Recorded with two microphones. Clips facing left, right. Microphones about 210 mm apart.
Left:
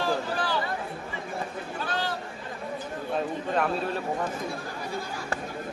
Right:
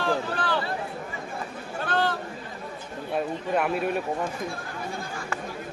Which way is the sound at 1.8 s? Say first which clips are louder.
Right 6 dB; 55° right (ahead or behind).